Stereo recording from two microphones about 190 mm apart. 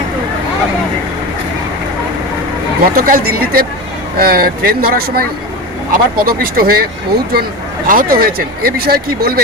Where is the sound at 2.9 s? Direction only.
50° right (ahead or behind).